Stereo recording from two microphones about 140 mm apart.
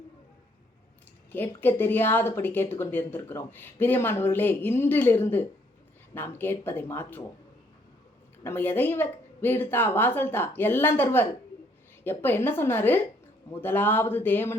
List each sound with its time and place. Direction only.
1.3 s speech: 15° left (ahead or behind)
8.4 s speech: 15° left (ahead or behind)